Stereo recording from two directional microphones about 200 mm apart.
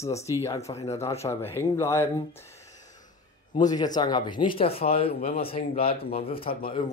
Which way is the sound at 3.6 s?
20° left (ahead or behind).